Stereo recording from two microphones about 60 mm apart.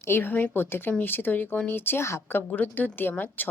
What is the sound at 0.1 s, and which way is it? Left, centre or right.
A woman's voice, left.